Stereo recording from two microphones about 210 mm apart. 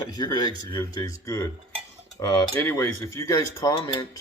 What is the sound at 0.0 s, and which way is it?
Speech, 20° left (ahead or behind).